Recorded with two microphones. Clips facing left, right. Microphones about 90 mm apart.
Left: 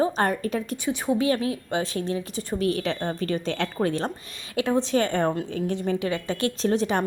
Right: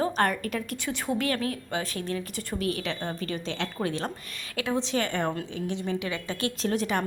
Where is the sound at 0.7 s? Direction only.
15° left (ahead or behind).